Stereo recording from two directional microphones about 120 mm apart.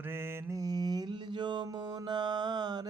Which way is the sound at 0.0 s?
20° right (ahead or behind).